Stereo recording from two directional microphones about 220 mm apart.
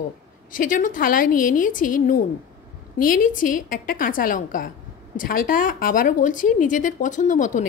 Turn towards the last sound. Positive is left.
turn(degrees=35)  # may be behind; listen again after turning